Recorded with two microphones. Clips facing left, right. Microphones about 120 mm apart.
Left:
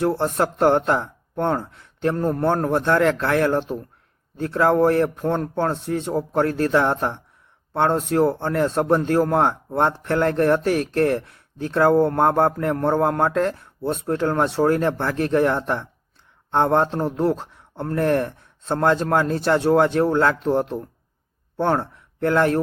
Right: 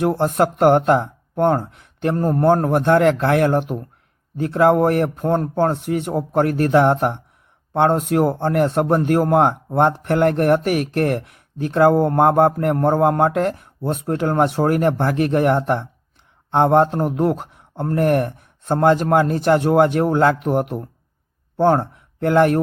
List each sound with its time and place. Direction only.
0.0 s speech: 15° right (ahead or behind)
11.1 s speech: 60° right (ahead or behind)
11.3 s speech: 15° right (ahead or behind)